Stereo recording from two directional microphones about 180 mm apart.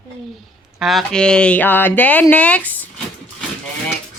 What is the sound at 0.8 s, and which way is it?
Speech, centre (ahead or behind).